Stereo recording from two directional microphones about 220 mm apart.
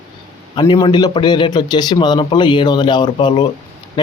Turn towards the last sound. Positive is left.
turn(degrees=20)  # may be behind; listen again after turning